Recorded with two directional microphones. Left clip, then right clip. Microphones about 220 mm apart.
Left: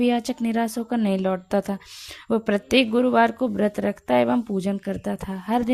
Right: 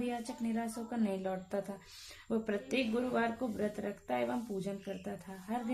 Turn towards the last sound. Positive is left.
turn(degrees=45)  # may be behind; listen again after turning